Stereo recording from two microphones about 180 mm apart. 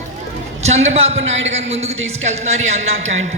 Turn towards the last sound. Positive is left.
turn(degrees=-40)  # may be behind; listen again after turning